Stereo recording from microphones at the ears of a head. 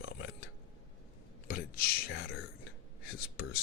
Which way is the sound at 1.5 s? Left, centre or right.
Left.